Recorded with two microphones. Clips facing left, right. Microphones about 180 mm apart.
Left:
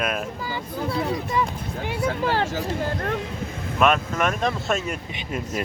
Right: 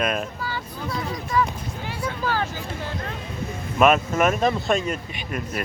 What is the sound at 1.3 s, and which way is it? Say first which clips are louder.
Speech: right 3 dB; 20° left (ahead or behind).